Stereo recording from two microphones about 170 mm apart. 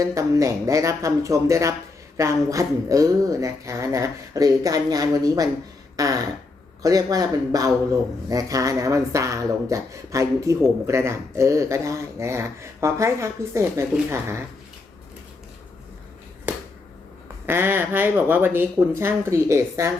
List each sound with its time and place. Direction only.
0.0 s a woman's voice: 20° right (ahead or behind)
17.4 s a woman's voice: 15° right (ahead or behind)